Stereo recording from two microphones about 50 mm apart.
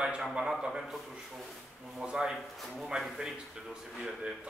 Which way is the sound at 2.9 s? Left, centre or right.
Centre.